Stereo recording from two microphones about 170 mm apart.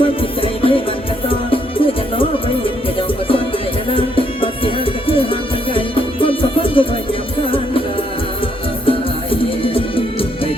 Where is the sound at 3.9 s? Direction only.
30° left (ahead or behind).